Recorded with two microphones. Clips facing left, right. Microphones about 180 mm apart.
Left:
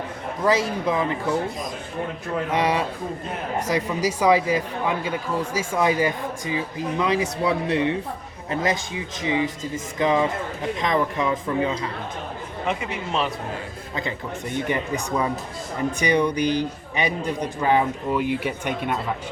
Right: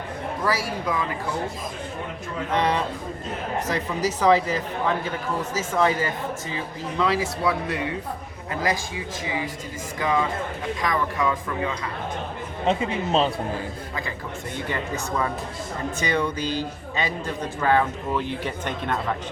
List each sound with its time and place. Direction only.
0.4 s speech: 20° left (ahead or behind)
2.5 s a man's voice: 10° left (ahead or behind); by 11.9 s 25° left (ahead or behind)
12.6 s speech: 25° right (ahead or behind)
14.5 s a man's voice: 15° left (ahead or behind)